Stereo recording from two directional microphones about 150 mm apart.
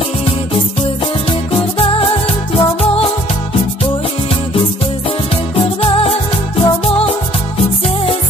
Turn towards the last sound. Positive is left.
turn(degrees=40)  # may be behind; listen again after turning